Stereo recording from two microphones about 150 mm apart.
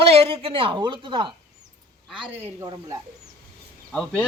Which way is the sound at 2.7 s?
20° right (ahead or behind).